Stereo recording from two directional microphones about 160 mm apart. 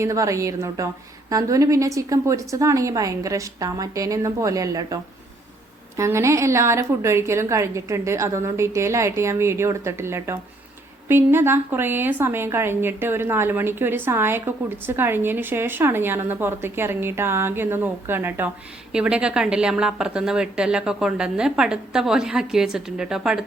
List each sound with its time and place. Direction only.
0.0 s a woman's voice: 20° right (ahead or behind)
6.0 s a woman's voice: 15° right (ahead or behind)